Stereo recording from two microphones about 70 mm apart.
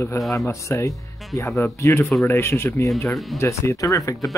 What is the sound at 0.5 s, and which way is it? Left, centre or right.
Speech, left.